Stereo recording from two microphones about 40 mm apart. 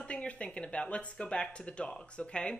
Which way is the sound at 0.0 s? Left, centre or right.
Left.